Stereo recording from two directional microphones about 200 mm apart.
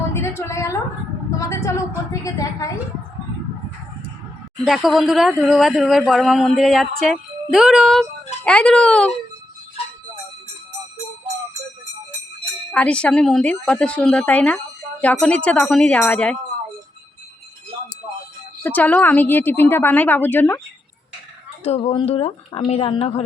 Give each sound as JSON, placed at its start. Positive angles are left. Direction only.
{"t": 0.1, "sound": "a woman's voice", "side_deg": 15}
{"t": 4.6, "sound": "speech", "side_deg": 0}
{"t": 12.7, "sound": "a woman's voice", "side_deg": 5}
{"t": 18.6, "sound": "a woman's voice", "side_deg": 10}
{"t": 21.6, "sound": "speech", "side_deg": 30}